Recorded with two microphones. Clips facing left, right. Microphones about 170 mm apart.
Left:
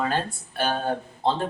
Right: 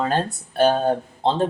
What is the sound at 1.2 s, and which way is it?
Speech, 25° right (ahead or behind).